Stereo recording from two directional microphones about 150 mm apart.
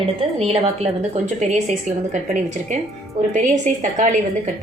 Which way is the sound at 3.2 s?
55° right (ahead or behind).